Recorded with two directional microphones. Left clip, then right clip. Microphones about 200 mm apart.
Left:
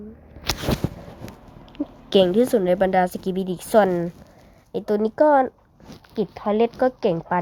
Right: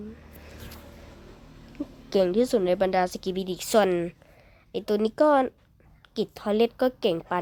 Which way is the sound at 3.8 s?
10° right (ahead or behind).